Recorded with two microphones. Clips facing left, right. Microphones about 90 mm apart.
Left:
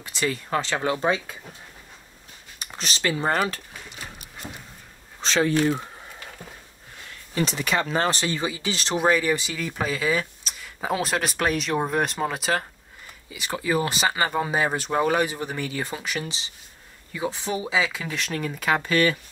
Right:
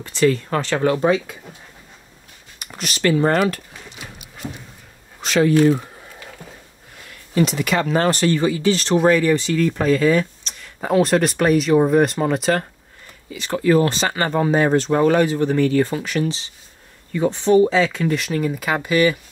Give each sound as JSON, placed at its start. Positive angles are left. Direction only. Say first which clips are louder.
{"t": 0.0, "sound": "speech", "louder": "right 10 dB", "side_deg": 15}
{"t": 3.0, "sound": "speech", "louder": "right 8 dB", "side_deg": 10}
{"t": 3.4, "sound": "a sound", "louder": "right 8 dB", "side_deg": 35}
{"t": 5.2, "sound": "speech", "louder": "right 6 dB", "side_deg": 30}
{"t": 7.4, "sound": "speech", "louder": "right 6 dB", "side_deg": 30}
{"t": 7.8, "sound": "speech", "louder": "right 6 dB", "side_deg": -40}
{"t": 8.1, "sound": "speech", "louder": "right 9 dB", "side_deg": 20}